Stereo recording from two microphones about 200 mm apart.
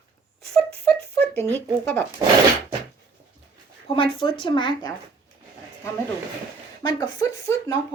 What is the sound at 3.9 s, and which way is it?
Speech, 25° left (ahead or behind).